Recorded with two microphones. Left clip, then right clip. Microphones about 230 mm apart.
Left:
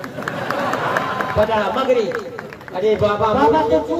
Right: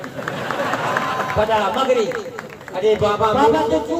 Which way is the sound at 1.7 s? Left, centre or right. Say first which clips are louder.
Even; right.